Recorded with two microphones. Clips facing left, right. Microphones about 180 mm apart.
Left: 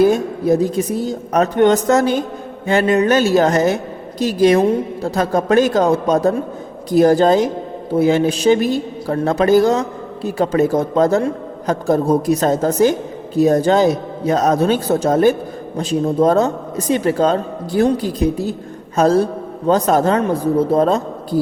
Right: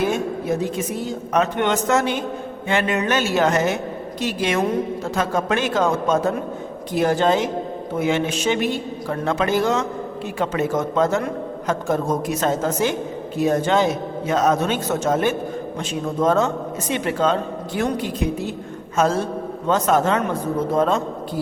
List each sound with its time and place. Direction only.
0.0 s a woman's voice: 35° left (ahead or behind)